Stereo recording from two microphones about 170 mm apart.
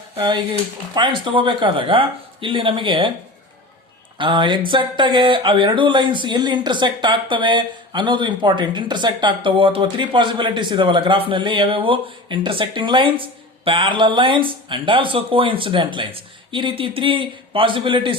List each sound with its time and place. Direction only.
0.1 s speech: 25° right (ahead or behind)
4.2 s speech: 30° right (ahead or behind)